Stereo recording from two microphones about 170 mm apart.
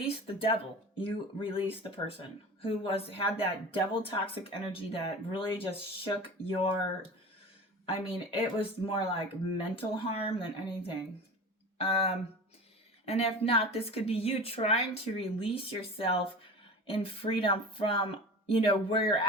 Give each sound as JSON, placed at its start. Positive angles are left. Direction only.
{"t": 0.0, "sound": "a woman's voice", "side_deg": 30}
{"t": 7.9, "sound": "a woman's voice", "side_deg": 35}